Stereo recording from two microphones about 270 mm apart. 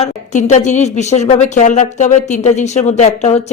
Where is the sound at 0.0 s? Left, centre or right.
Left.